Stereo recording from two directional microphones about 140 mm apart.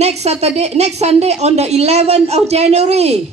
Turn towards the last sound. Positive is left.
turn(degrees=-50)  # may be behind; listen again after turning